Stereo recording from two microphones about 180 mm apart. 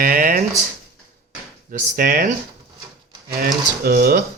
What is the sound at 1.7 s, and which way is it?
Speech, 50° right (ahead or behind).